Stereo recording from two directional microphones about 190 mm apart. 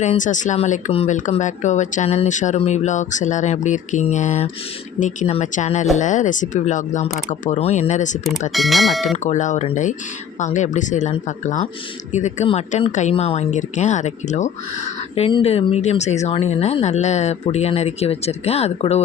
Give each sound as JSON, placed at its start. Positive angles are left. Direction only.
{"t": 0.0, "sound": "speech", "side_deg": 40}
{"t": 8.5, "sound": "speech", "side_deg": 0}
{"t": 9.1, "sound": "speech", "side_deg": 40}